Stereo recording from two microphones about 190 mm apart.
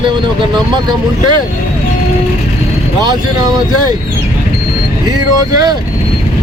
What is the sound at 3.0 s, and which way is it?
Speech, 20° right (ahead or behind).